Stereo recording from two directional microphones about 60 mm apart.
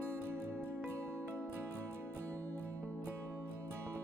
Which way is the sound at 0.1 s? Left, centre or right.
Right.